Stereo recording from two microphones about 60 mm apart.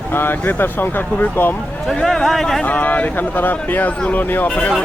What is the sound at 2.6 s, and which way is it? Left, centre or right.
Speech, left.